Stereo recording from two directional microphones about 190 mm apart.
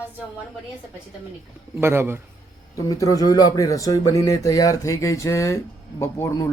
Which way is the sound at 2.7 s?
20° left (ahead or behind).